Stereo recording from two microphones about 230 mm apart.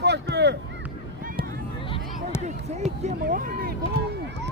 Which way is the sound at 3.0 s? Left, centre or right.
Right.